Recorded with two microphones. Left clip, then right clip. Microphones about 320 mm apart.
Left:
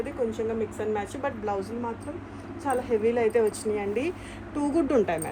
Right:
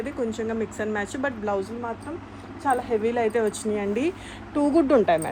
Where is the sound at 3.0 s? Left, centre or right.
Right.